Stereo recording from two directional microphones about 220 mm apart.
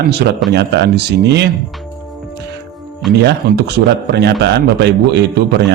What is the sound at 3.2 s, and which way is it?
Speech, 50° right (ahead or behind).